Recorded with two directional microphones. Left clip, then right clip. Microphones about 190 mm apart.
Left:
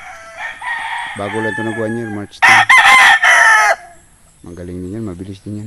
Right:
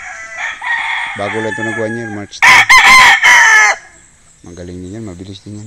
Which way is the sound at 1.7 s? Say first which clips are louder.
Right 2 dB; 10° left (ahead or behind).